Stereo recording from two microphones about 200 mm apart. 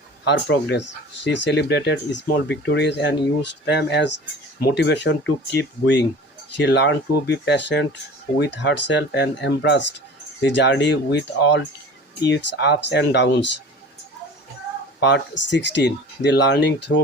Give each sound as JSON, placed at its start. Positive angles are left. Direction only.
{"t": 0.3, "sound": "speech", "side_deg": 60}
{"t": 15.0, "sound": "speech", "side_deg": 65}